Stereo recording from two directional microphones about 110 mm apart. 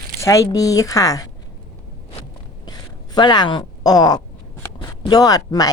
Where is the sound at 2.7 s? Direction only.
40° left (ahead or behind).